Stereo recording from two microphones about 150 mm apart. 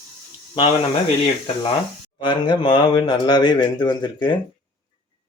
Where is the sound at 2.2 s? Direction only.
35° left (ahead or behind).